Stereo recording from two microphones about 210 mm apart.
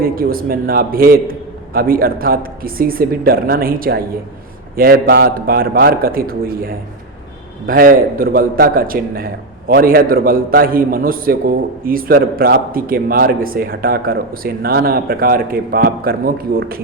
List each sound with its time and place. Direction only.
0.0 s a man's voice: 45° right (ahead or behind)